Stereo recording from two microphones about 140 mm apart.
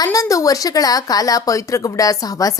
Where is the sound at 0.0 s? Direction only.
25° left (ahead or behind).